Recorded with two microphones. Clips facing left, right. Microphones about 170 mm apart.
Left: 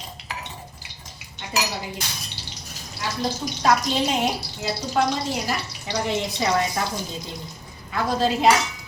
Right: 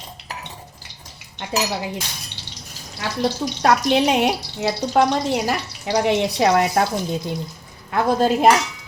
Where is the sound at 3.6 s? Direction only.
65° right (ahead or behind).